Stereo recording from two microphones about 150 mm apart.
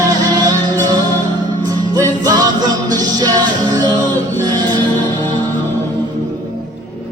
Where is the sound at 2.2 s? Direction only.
25° right (ahead or behind).